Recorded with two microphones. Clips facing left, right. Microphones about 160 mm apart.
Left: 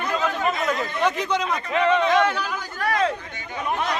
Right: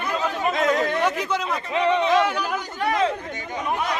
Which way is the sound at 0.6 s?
80° right.